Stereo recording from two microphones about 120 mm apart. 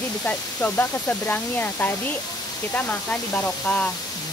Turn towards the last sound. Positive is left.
turn(degrees=10)  # may be behind; listen again after turning